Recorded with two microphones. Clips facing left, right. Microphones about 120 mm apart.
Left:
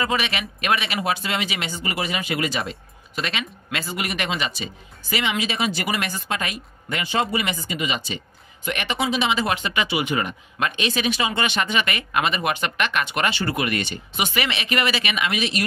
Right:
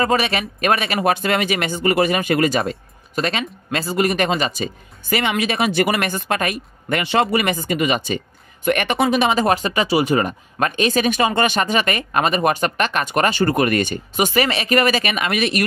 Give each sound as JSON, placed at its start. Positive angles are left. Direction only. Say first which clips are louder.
{"t": 0.0, "sound": "speech", "louder": "right 6 dB", "side_deg": -40}
{"t": 5.1, "sound": "speech", "louder": "right 5 dB", "side_deg": -55}